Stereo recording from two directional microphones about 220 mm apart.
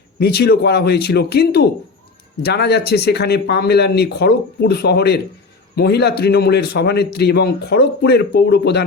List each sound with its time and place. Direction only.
0.2 s a man's voice: 45° left (ahead or behind)